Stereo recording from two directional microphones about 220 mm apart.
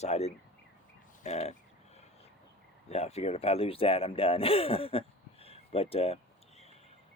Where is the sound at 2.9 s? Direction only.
30° left (ahead or behind).